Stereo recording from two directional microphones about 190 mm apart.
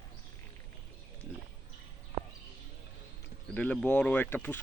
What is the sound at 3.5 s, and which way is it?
Speech, 5° left (ahead or behind).